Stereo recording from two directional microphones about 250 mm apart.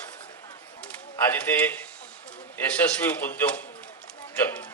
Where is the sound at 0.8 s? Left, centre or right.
Centre.